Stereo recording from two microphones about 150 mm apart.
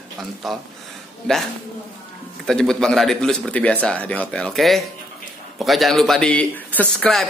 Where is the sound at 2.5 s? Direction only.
5° left (ahead or behind).